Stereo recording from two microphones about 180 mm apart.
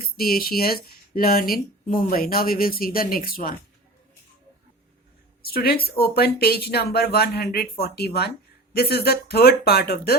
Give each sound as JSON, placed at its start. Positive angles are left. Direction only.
{"t": 0.0, "sound": "speech", "side_deg": 55}
{"t": 5.4, "sound": "speech", "side_deg": 60}